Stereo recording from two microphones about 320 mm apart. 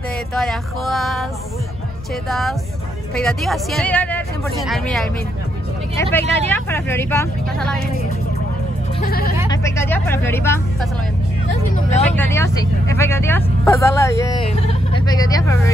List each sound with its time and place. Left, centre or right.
0.3 s speech: centre
2.2 s speech: centre
9.0 s speech: left
9.5 s speech: centre
12.1 s speech: centre